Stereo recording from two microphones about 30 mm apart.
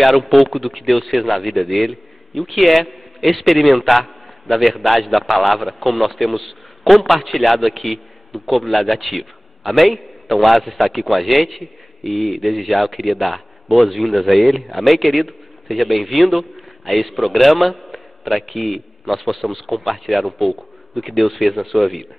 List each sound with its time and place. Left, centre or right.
0.0 s a man's voice: centre